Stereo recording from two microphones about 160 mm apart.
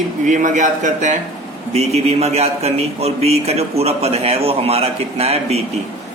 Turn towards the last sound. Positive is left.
turn(degrees=-40)  # may be behind; listen again after turning